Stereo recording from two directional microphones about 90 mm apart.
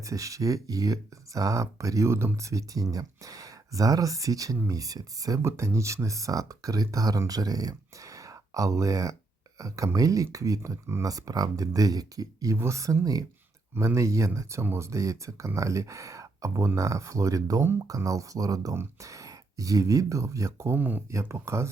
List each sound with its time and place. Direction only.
0.0 s speech: 40° right (ahead or behind)
20.7 s speech: 20° right (ahead or behind)
21.1 s speech: 30° right (ahead or behind)